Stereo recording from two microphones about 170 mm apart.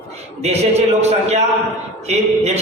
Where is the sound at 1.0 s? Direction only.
40° right (ahead or behind).